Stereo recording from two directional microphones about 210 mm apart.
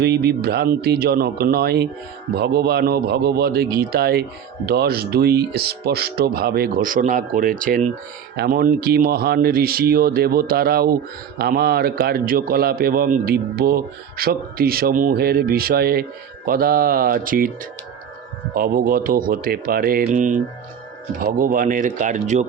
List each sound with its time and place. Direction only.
0.0 s a man's voice: 50° right (ahead or behind)